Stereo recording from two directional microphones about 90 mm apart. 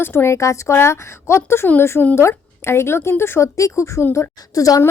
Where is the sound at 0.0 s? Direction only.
25° left (ahead or behind).